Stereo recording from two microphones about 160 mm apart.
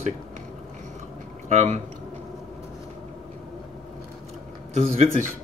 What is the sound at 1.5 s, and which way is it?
Speech, 45° right (ahead or behind).